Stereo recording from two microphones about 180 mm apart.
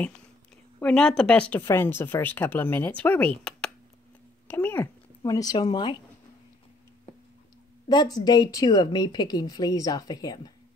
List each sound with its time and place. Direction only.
0.7 s speech: 5° left (ahead or behind); by 5.9 s 25° left (ahead or behind)
7.9 s speech: 25° left (ahead or behind)